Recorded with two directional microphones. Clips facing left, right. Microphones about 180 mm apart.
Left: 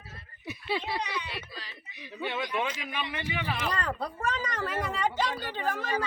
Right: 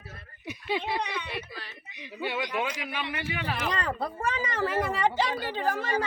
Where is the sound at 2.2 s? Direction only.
15° right (ahead or behind).